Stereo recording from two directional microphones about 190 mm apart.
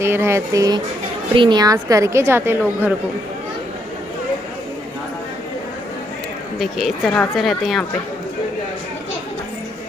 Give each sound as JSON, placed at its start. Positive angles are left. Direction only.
{"t": 0.0, "sound": "a woman's voice", "side_deg": -15}
{"t": 6.6, "sound": "speech", "side_deg": 0}